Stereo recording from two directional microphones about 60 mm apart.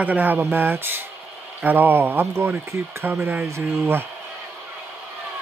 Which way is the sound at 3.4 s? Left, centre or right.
Right.